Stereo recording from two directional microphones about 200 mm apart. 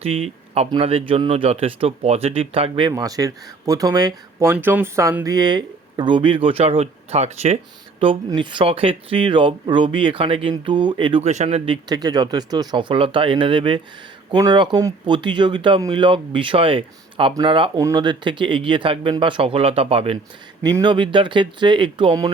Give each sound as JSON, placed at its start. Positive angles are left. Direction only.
{"t": 0.0, "sound": "speech", "side_deg": -30}